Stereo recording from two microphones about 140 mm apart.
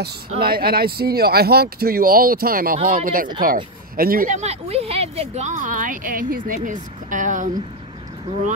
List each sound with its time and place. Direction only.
0.4 s speech: 90° right
4.4 s speech: 50° right (ahead or behind); by 7.5 s 70° right (ahead or behind)